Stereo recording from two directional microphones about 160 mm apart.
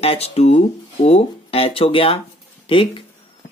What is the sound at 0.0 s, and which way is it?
Speech, 40° left (ahead or behind).